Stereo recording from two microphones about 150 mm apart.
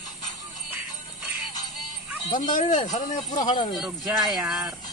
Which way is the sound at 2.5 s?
55° left (ahead or behind).